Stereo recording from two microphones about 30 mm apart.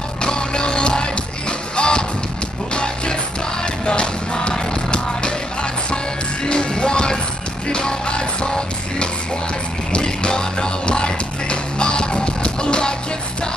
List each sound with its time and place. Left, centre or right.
0.2 s music: left